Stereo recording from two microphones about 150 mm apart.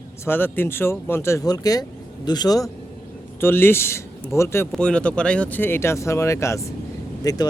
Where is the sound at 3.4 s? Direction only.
15° left (ahead or behind).